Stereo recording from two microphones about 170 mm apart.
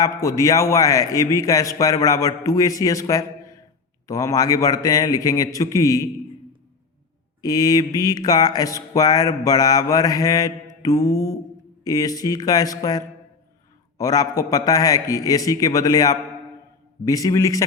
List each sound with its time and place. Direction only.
0.0 s a man's voice: 20° left (ahead or behind)
7.4 s a man's voice: 20° left (ahead or behind)